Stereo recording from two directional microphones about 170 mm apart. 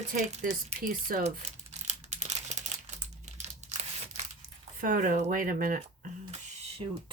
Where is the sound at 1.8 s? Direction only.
40° right (ahead or behind).